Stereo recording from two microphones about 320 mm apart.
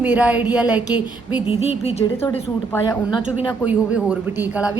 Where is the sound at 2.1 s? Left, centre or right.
Centre.